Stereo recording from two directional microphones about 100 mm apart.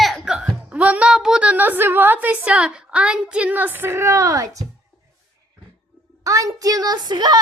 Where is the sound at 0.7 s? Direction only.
15° right (ahead or behind); by 4.6 s 35° right (ahead or behind).